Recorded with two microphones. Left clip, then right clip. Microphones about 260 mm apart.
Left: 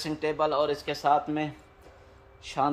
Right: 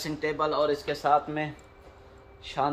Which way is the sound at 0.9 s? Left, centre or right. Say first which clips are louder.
Even; left.